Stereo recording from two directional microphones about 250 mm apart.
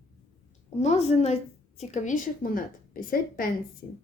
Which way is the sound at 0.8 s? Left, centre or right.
Left.